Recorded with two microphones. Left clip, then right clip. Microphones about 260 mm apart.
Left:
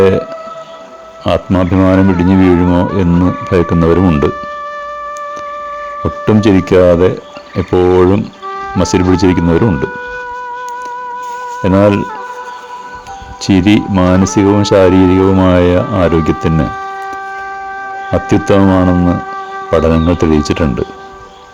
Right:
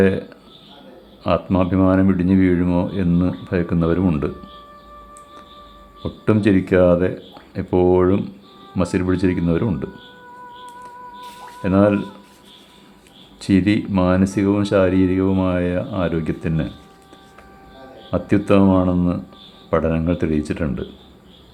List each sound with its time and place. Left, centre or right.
0.0 s speech: left
6.0 s speech: left
11.6 s speech: left
13.4 s speech: left
18.1 s speech: left